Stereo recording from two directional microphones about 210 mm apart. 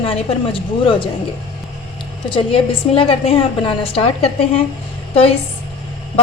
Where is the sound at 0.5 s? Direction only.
25° left (ahead or behind).